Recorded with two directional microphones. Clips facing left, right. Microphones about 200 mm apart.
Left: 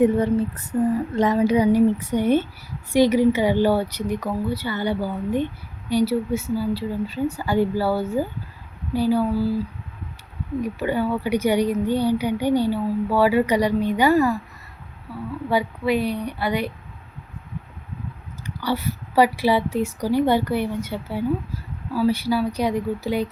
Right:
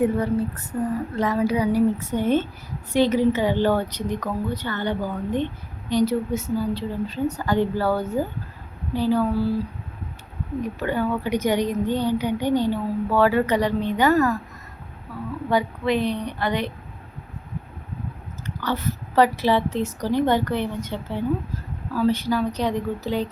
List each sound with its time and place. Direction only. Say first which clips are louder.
0.0 s a woman's voice: left 3 dB; 20° left (ahead or behind)
10.6 s a woman's voice: left 1 dB; 10° left (ahead or behind)
15.4 s a woman's voice: even; 10° left (ahead or behind)
18.4 s a woman's voice: left 1 dB; 10° left (ahead or behind)